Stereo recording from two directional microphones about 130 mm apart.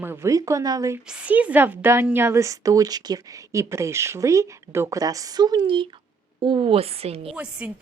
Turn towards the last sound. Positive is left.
turn(degrees=-10)  # may be behind; listen again after turning